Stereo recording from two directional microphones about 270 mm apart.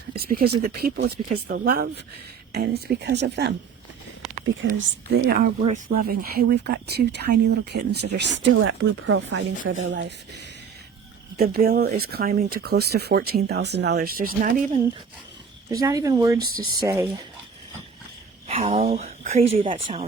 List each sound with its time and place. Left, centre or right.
0.2 s speech: right
4.6 s speech: right
11.3 s speech: right
15.8 s speech: centre
18.4 s speech: right